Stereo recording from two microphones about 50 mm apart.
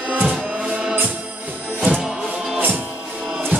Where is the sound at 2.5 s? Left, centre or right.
Right.